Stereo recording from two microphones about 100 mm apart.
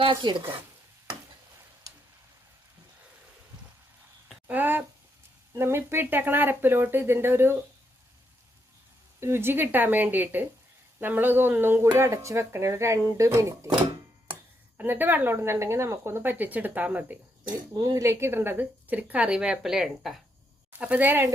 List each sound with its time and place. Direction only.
0.0 s speech: 55° right (ahead or behind)
4.4 s a sound: 20° right (ahead or behind)
5.5 s speech: 25° right (ahead or behind)
9.2 s speech: 25° right (ahead or behind)
14.8 s speech: 20° right (ahead or behind)
17.7 s a woman's voice: 35° right (ahead or behind); by 20.1 s 5° right (ahead or behind)
20.7 s speech: 15° right (ahead or behind)